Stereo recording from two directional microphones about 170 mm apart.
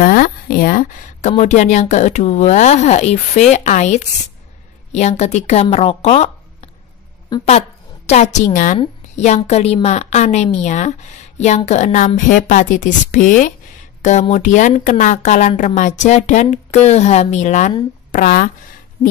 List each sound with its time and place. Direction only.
0.0 s a woman's voice: 55° left (ahead or behind); by 6.7 s 40° left (ahead or behind)
7.3 s speech: 25° left (ahead or behind)
8.1 s a woman's voice: 40° left (ahead or behind)